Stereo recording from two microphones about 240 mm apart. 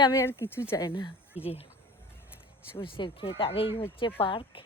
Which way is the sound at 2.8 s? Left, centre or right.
Left.